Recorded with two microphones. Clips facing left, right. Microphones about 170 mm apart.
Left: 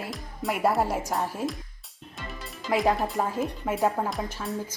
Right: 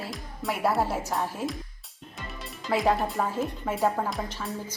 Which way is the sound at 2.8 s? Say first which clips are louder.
Even; centre (ahead or behind).